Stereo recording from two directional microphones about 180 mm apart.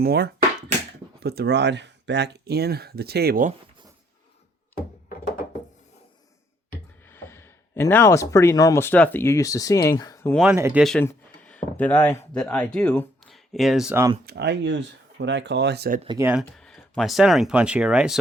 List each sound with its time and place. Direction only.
0.0 s speech: 60° right (ahead or behind)
7.1 s speech: 15° left (ahead or behind)
10.4 s speech: 10° right (ahead or behind)
11.0 s speech: 10° left (ahead or behind)
13.9 s speech: 15° right (ahead or behind)
14.3 s speech: 65° right (ahead or behind)
16.0 s speech: 15° right (ahead or behind)
16.3 s speech: centre (ahead or behind)